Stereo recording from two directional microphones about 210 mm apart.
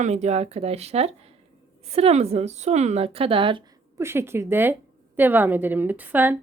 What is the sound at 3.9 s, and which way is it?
Speech, 10° right (ahead or behind).